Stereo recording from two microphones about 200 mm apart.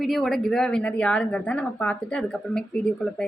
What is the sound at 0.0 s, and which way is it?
A woman's voice, centre (ahead or behind).